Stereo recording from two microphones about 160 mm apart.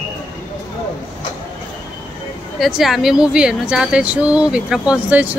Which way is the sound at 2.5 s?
Centre (ahead or behind).